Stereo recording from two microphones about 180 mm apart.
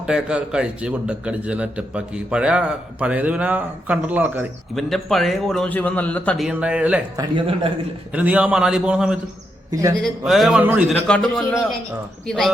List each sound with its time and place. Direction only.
0.0 s a man's voice: 5° right (ahead or behind)
4.7 s a man's voice: centre (ahead or behind)
7.2 s a man's voice: 30° right (ahead or behind)
8.1 s a man's voice: 5° right (ahead or behind)
9.7 s a man's voice: 20° right (ahead or behind)
10.0 s a man's voice: centre (ahead or behind)
11.0 s a man's voice: 5° left (ahead or behind)